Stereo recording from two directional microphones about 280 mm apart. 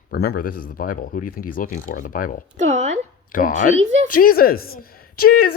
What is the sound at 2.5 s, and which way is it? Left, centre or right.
Speech, right.